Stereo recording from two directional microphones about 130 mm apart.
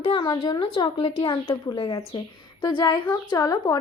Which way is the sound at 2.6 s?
40° left (ahead or behind).